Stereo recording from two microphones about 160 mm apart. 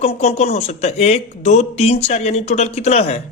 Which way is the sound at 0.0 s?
40° left (ahead or behind).